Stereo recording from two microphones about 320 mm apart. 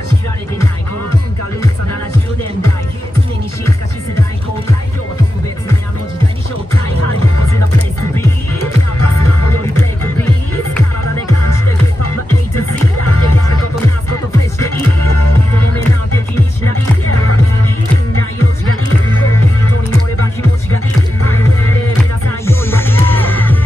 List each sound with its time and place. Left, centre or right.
6.7 s music: left
11.2 s music: left
15.0 s music: left
18.7 s music: left
22.5 s music: centre